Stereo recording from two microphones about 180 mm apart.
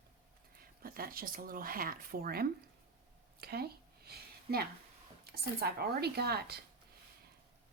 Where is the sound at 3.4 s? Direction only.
60° right (ahead or behind).